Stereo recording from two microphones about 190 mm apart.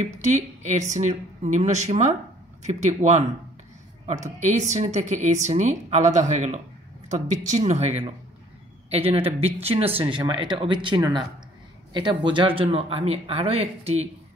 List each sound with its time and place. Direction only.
0.0 s a woman's voice: 40° right (ahead or behind)
4.4 s a woman's voice: 40° right (ahead or behind)